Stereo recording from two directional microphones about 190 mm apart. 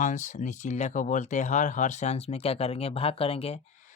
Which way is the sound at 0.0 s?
40° left (ahead or behind).